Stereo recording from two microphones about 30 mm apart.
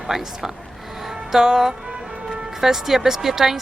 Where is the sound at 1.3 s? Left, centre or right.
Centre.